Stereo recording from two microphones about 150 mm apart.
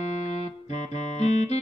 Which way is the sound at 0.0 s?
50° left (ahead or behind).